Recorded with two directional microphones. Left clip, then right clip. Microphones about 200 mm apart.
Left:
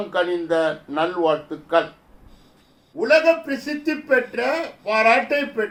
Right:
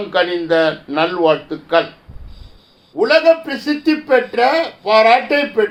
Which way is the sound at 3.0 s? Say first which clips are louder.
Right 8 dB; 45° right (ahead or behind).